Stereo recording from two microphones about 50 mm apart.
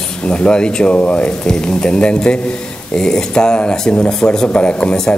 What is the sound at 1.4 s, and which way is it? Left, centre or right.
Speech, centre.